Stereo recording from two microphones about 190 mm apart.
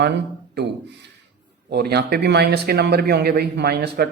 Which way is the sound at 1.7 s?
60° right (ahead or behind).